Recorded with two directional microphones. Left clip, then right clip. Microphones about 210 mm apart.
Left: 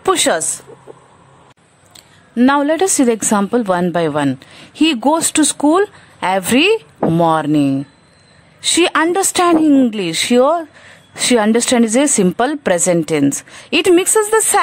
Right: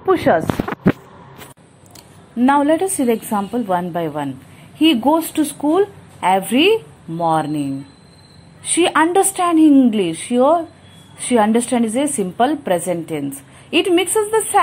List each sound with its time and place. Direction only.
0.0 s a sound: 50° left (ahead or behind)
2.3 s a woman's voice: 45° left (ahead or behind)
8.7 s a woman's voice: 45° left (ahead or behind)